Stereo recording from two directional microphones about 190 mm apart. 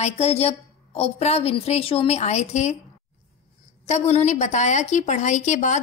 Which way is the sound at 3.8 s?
35° left (ahead or behind).